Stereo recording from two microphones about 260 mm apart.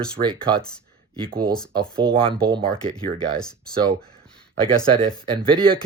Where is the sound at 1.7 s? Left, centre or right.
Centre.